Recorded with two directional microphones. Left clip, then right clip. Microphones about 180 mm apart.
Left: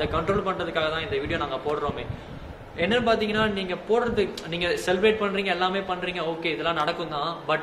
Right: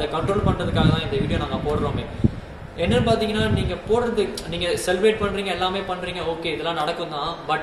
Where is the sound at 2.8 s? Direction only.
5° left (ahead or behind).